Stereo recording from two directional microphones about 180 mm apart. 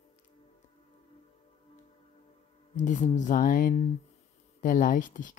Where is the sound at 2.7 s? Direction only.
45° left (ahead or behind).